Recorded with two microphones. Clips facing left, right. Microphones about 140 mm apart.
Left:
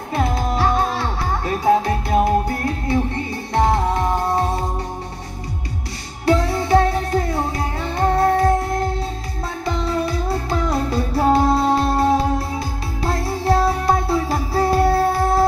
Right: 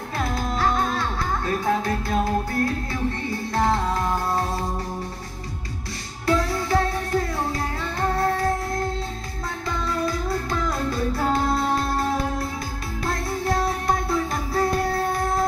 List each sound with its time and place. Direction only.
0.1 s music: 25° left (ahead or behind)
6.2 s music: 25° left (ahead or behind)
9.7 s music: 25° left (ahead or behind)